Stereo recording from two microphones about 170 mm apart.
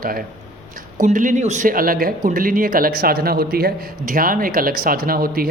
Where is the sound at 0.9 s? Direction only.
50° right (ahead or behind).